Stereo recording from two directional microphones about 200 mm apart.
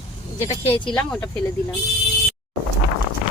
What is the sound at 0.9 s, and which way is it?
Speech, 5° left (ahead or behind).